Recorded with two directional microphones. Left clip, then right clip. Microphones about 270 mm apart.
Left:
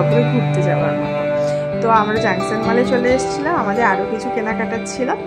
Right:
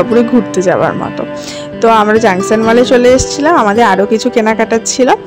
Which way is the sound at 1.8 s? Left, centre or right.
Right.